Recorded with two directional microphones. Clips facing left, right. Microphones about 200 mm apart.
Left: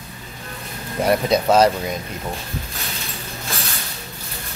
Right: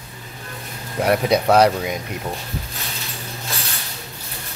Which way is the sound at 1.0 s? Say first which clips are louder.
Even; 10° right (ahead or behind).